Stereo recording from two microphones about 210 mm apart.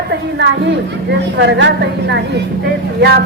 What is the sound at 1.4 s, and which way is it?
Speech, 60° right (ahead or behind).